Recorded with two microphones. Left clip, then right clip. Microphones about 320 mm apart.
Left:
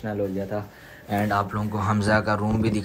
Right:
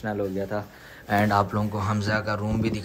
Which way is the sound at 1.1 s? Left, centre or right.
Centre.